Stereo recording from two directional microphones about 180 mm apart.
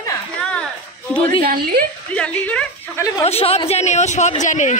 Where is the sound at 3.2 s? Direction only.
35° left (ahead or behind).